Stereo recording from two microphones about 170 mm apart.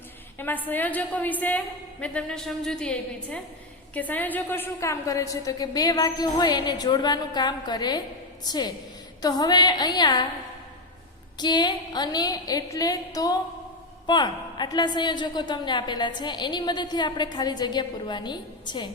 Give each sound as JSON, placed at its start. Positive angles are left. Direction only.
{"t": 0.3, "sound": "a woman's voice", "side_deg": 10}
{"t": 11.3, "sound": "a woman's voice", "side_deg": 25}